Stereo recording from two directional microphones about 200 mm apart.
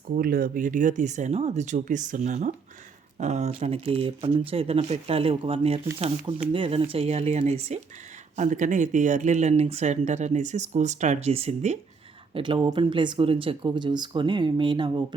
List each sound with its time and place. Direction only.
0.1 s speech: 45° right (ahead or behind); by 15.0 s 25° right (ahead or behind)